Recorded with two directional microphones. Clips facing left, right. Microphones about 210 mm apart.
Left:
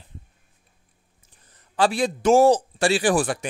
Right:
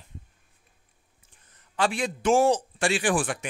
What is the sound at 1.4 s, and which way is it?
A man's voice, 35° left (ahead or behind).